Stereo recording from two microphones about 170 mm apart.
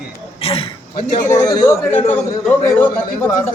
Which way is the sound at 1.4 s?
20° left (ahead or behind).